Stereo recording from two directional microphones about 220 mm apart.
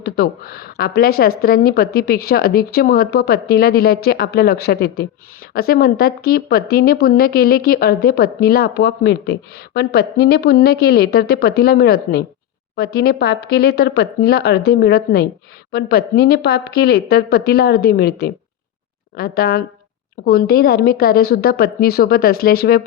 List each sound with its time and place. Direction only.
0.0 s speech: 45° left (ahead or behind)